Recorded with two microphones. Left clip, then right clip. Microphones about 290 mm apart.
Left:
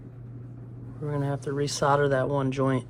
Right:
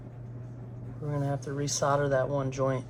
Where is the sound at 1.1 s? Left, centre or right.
Left.